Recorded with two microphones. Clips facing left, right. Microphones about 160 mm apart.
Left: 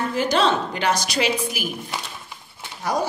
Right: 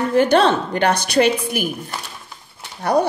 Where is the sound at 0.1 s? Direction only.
60° right (ahead or behind).